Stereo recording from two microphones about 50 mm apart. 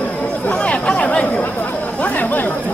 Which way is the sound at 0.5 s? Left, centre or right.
Left.